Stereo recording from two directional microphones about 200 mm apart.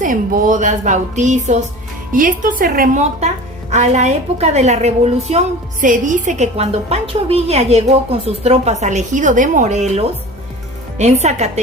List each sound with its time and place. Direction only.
0.0 s a woman's voice: 45° right (ahead or behind)